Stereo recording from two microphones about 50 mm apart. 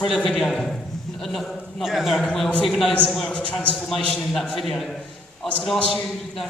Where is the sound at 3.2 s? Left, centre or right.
Left.